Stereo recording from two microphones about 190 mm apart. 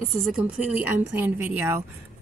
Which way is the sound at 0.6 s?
10° right (ahead or behind).